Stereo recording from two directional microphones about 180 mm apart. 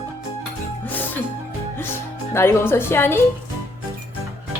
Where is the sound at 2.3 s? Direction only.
15° left (ahead or behind).